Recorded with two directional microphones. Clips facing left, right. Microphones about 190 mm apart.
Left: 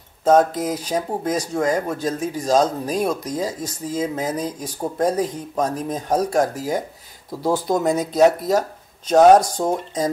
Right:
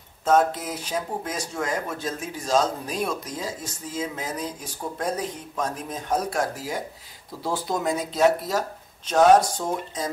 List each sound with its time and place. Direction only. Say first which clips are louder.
0.2 s speech: left 5 dB; 40° left (ahead or behind)